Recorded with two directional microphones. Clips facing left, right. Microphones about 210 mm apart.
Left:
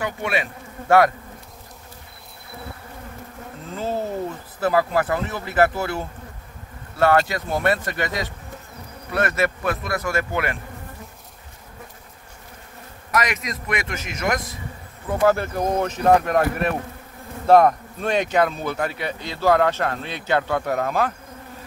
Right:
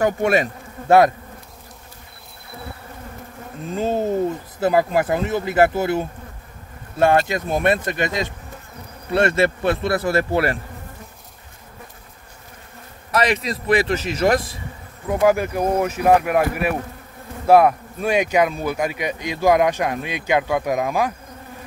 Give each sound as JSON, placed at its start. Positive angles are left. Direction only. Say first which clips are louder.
{"t": 0.0, "sound": "bee", "louder": "right 7 dB", "side_deg": -45}
{"t": 0.8, "sound": "bee", "louder": "right 3 dB", "side_deg": -20}
{"t": 3.6, "sound": "speech", "louder": "right 5 dB", "side_deg": -20}
{"t": 13.1, "sound": "speech", "louder": "right 4 dB", "side_deg": -30}
{"t": 15.0, "sound": "speech", "louder": "right 2 dB", "side_deg": -10}